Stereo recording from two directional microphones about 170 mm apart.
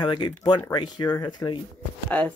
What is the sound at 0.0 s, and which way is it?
Speech, 25° left (ahead or behind).